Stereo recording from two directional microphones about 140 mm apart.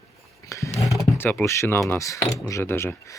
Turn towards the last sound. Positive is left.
turn(degrees=15)  # may be behind; listen again after turning